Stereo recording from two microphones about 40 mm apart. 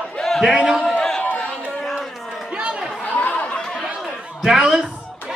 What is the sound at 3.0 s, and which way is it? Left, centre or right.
Chatter, left.